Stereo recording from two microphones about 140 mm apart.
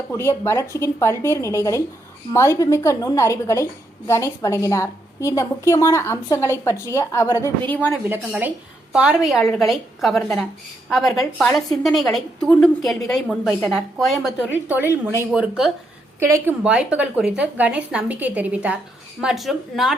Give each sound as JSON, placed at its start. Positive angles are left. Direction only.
{"t": 0.1, "sound": "a woman's voice", "side_deg": 20}
{"t": 8.4, "sound": "a woman's voice", "side_deg": -10}
{"t": 14.5, "sound": "a woman's voice", "side_deg": -15}
{"t": 15.3, "sound": "a woman's voice", "side_deg": -5}